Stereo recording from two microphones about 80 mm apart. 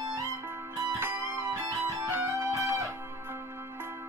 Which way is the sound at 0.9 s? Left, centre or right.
Right.